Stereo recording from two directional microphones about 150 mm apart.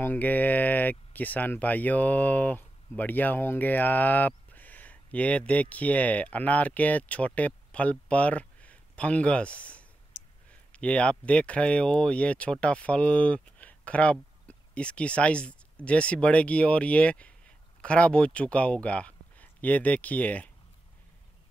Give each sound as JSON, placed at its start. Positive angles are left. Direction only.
{"t": 0.0, "sound": "speech", "side_deg": 10}